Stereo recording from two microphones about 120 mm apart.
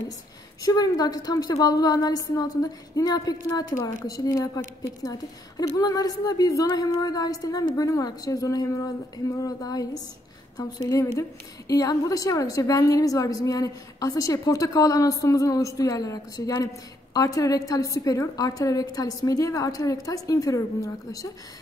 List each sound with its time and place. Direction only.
0.6 s a woman's voice: 30° left (ahead or behind)